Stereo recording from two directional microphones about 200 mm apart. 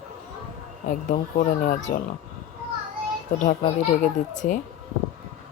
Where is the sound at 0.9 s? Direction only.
40° left (ahead or behind).